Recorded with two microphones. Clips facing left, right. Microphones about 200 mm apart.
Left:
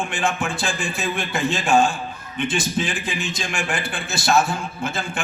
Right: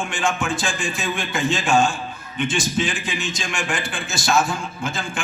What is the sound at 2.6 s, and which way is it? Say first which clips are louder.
A man's voice: right 1 dB; 55° left (ahead or behind).